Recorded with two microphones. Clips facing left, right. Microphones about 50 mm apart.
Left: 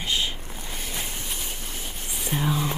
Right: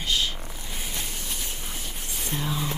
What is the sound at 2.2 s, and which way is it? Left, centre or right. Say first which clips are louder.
Speech: left 4 dB; centre.